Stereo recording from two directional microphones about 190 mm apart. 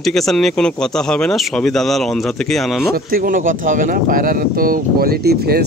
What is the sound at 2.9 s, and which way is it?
Speech, 50° right (ahead or behind).